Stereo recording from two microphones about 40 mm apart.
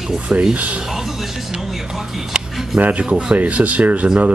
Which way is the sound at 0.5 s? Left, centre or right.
Right.